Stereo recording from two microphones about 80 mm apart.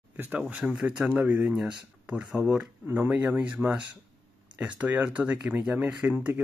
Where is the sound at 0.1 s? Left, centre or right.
Right.